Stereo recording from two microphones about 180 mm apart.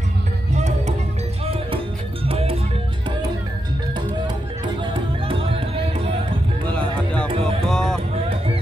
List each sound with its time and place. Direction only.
0.6 s music: 40° right (ahead or behind)
6.7 s music: 5° left (ahead or behind)
7.2 s music: 30° right (ahead or behind)
7.6 s music: 5° left (ahead or behind)